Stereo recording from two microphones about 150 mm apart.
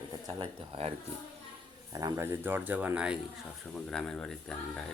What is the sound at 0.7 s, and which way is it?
Speech, 45° right (ahead or behind).